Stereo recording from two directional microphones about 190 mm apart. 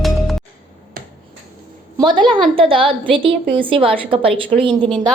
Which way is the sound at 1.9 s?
25° right (ahead or behind).